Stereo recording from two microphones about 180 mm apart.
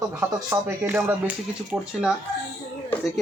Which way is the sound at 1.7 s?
Centre (ahead or behind).